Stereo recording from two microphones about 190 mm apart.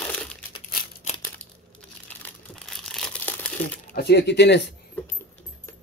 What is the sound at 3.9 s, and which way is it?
Speech, 60° left (ahead or behind).